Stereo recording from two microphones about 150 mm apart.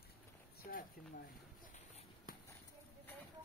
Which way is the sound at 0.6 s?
75° left (ahead or behind).